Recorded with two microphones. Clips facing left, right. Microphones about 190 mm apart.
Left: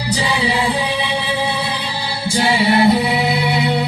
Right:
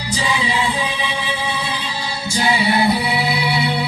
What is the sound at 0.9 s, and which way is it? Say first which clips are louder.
Music: left 4 dB; 65° left (ahead or behind).